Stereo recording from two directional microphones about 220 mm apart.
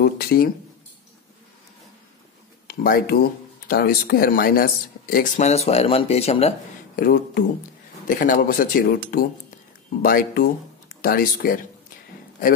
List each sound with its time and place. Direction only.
0.0 s speech: 45° left (ahead or behind)
2.7 s speech: 40° left (ahead or behind)
5.1 s speech: 30° left (ahead or behind)
7.0 s speech: 40° left (ahead or behind)